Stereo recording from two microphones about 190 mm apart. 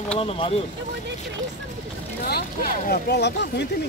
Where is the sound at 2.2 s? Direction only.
50° left (ahead or behind).